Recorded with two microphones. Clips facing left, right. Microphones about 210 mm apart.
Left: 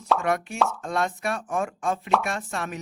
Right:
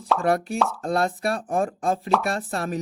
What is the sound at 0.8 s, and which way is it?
Speech, 35° right (ahead or behind).